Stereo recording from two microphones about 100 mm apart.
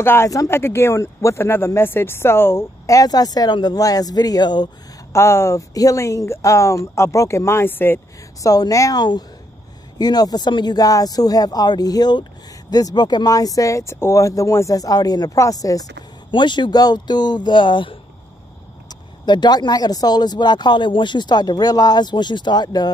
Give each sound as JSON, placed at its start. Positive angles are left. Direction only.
{"t": 0.0, "sound": "speech", "side_deg": 25}
{"t": 5.1, "sound": "speech", "side_deg": 30}
{"t": 8.4, "sound": "speech", "side_deg": 35}
{"t": 16.3, "sound": "speech", "side_deg": 50}